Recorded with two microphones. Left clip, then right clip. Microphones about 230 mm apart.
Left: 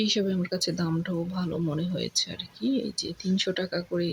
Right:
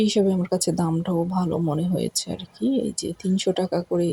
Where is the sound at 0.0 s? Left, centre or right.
Centre.